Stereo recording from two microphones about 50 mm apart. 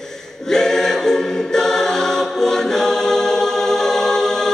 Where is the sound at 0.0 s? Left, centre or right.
Centre.